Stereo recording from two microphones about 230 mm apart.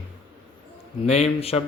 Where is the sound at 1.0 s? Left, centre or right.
Left.